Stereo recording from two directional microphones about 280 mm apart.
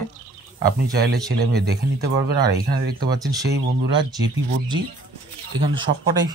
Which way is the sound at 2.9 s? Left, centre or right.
Centre.